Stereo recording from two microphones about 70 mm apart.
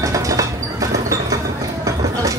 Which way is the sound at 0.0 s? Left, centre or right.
Right.